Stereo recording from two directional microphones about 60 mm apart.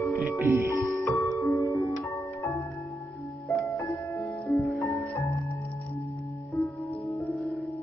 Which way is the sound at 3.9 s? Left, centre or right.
Left.